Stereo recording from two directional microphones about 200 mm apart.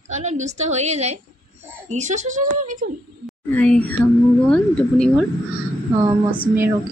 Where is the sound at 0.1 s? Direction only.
35° right (ahead or behind).